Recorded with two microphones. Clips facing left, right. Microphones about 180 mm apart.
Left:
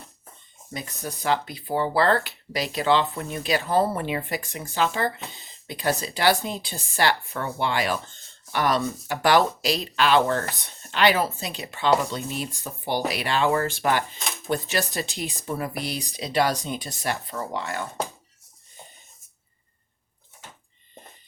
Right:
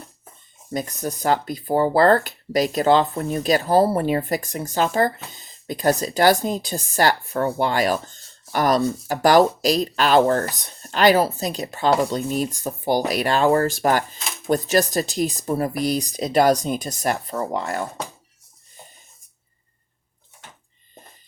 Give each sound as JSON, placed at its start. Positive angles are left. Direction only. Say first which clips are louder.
{"t": 0.7, "sound": "speech", "louder": "right 8 dB", "side_deg": -45}